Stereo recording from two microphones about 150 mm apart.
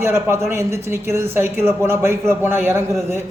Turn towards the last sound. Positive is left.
turn(degrees=-15)  # may be behind; listen again after turning